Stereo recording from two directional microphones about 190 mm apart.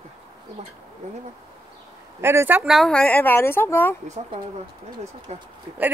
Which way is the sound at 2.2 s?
10° right (ahead or behind).